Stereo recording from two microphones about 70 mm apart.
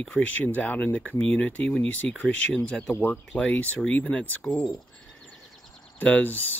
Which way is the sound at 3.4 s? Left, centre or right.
Left.